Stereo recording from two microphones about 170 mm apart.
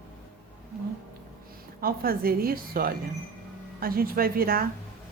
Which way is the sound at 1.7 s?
60° right (ahead or behind).